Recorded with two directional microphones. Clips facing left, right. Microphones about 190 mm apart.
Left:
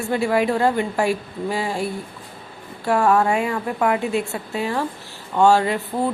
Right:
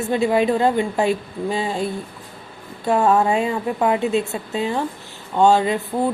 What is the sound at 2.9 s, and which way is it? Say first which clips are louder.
Speech: right 1 dB; 20° right (ahead or behind).